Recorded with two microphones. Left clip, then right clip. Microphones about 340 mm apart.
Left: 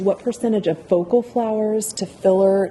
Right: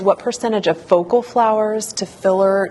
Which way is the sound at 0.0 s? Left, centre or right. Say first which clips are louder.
Right 4 dB; right.